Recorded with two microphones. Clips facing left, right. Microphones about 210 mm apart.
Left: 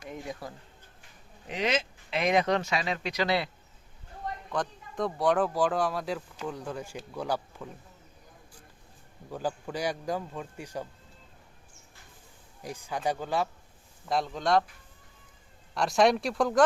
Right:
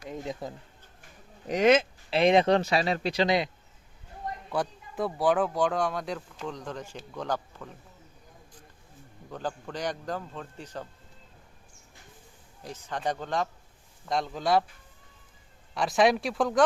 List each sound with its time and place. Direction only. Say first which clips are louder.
0.0 s a sound: right 3 dB; 20° right (ahead or behind)
1.5 s speech: right 8 dB; 45° right (ahead or behind)
2.0 s speech: right 5 dB; 30° right (ahead or behind)
3.2 s speech: right 1 dB; 20° right (ahead or behind)
4.5 s speech: right 2 dB; 5° right (ahead or behind); by 7.7 s 10° left (ahead or behind)
9.3 s a man's voice: left 2 dB; 10° left (ahead or behind)
12.6 s a man's voice: left 1 dB; 10° left (ahead or behind)
15.7 s speech: even; centre (ahead or behind)